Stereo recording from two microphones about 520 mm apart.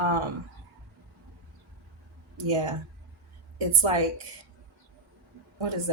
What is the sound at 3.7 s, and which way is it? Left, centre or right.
Speech, right.